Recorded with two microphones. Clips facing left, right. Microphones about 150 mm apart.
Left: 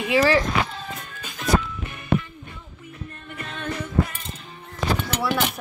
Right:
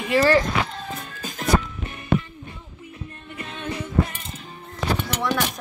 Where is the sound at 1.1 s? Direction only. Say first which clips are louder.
Right 1 dB; 45° right (ahead or behind).